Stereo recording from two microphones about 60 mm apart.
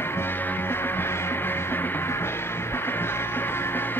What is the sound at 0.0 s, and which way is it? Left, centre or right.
Music, left.